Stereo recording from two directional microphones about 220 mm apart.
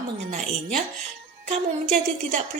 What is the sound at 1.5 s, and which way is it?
Speech, 35° right (ahead or behind).